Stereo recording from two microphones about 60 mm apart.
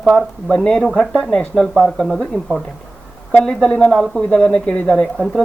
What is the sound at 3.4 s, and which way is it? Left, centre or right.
Speech, centre.